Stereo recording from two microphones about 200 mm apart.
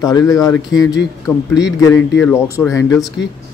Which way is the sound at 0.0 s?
20° left (ahead or behind).